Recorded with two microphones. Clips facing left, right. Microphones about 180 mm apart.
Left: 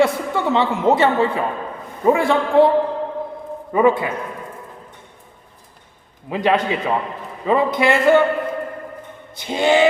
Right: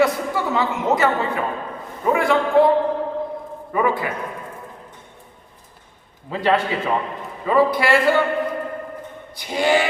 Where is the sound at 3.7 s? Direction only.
25° left (ahead or behind).